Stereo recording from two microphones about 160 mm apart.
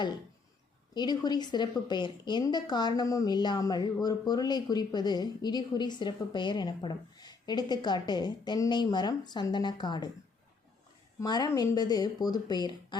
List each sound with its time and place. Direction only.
0.9 s a woman's voice: 25° left (ahead or behind)
11.2 s a woman's voice: 25° left (ahead or behind)